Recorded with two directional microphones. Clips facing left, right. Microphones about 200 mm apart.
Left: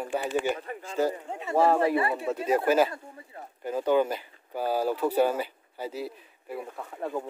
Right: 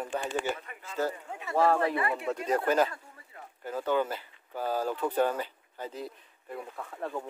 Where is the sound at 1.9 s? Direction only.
30° left (ahead or behind).